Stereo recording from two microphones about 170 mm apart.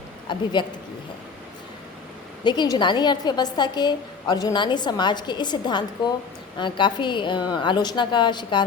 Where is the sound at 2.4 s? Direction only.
25° left (ahead or behind).